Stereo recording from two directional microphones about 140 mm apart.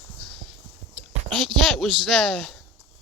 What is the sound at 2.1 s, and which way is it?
Speech, centre (ahead or behind).